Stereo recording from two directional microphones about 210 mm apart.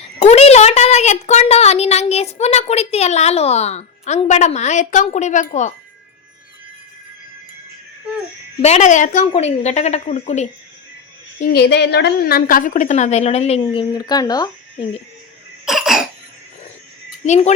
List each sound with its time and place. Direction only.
0.2 s a woman's voice: 30° left (ahead or behind)
8.6 s a woman's voice: 35° left (ahead or behind)
11.3 s a woman's voice: 45° left (ahead or behind); by 14.8 s 20° left (ahead or behind)
15.6 s cough: centre (ahead or behind)
17.2 s a woman's voice: 35° left (ahead or behind)